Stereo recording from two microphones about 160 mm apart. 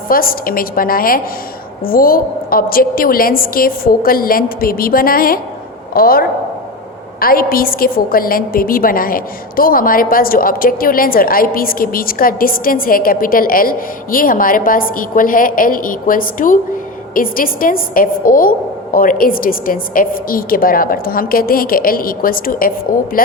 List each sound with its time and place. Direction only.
0.1 s a woman's voice: 65° left (ahead or behind)